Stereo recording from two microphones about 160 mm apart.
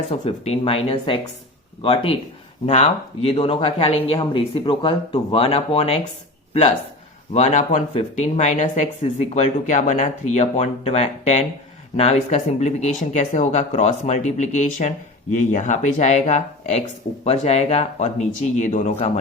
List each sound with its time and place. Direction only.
0.1 s speech: 40° left (ahead or behind)
7.3 s speech: 50° left (ahead or behind)